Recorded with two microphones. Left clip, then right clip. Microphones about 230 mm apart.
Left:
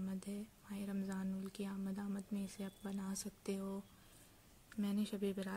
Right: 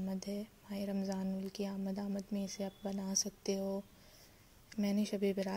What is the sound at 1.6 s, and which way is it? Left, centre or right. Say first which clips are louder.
Speech: right 5 dB; left.